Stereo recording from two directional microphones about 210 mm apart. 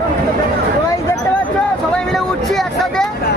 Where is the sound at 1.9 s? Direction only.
Centre (ahead or behind).